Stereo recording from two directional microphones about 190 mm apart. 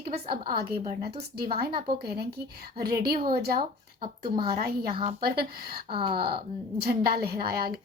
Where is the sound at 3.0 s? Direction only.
50° right (ahead or behind).